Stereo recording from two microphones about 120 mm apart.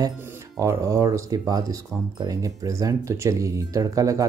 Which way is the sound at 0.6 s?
25° right (ahead or behind).